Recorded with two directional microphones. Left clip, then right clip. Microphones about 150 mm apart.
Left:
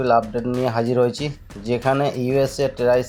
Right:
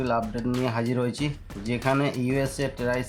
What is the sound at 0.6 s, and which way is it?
Speech, 30° left (ahead or behind).